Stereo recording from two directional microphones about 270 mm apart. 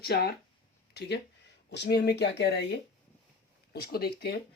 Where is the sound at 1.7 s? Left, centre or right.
Left.